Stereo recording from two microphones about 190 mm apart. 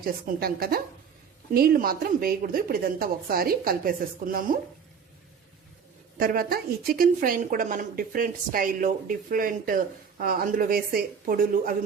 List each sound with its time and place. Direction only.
0.0 s a woman's voice: 50° right (ahead or behind)
6.1 s a woman's voice: 50° right (ahead or behind)